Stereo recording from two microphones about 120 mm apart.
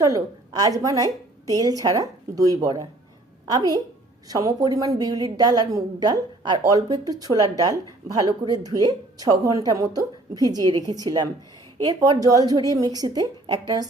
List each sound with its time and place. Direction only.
0.0 s a woman's voice: 30° right (ahead or behind)